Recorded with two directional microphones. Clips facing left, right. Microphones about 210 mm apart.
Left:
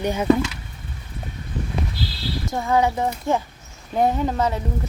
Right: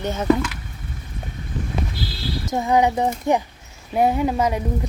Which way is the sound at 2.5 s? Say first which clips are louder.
Right 2 dB; 20° right (ahead or behind).